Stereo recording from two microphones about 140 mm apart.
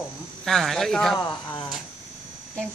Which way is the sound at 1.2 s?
30° left (ahead or behind).